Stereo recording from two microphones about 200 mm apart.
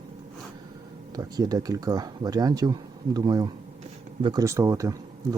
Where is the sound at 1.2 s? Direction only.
20° right (ahead or behind).